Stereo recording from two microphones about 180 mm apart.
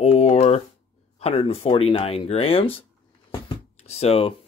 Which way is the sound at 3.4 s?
35° left (ahead or behind).